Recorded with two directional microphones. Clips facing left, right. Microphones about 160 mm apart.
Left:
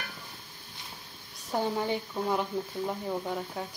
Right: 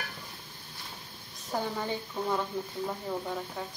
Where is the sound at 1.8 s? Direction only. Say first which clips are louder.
Left 3 dB; 15° left (ahead or behind).